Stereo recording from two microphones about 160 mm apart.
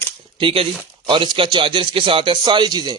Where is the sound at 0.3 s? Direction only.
35° right (ahead or behind).